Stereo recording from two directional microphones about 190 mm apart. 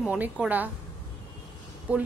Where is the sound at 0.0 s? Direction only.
5° right (ahead or behind).